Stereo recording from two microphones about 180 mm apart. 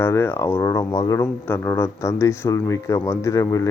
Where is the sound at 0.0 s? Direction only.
10° left (ahead or behind).